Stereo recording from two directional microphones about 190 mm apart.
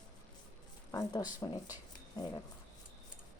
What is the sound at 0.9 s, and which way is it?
Speech, 20° left (ahead or behind).